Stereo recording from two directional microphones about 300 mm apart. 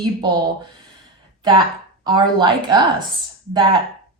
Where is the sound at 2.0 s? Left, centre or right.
Centre.